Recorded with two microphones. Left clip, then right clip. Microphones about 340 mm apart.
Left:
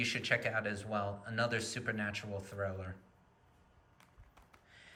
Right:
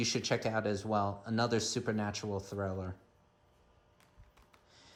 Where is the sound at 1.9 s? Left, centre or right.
Centre.